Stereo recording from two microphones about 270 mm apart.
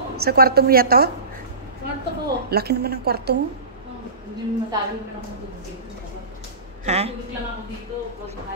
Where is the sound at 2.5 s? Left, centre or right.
Right.